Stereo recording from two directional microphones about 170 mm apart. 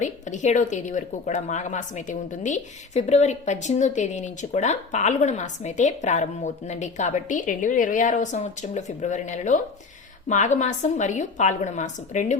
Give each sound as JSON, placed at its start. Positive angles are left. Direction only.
{"t": 0.0, "sound": "a woman's voice", "side_deg": 45}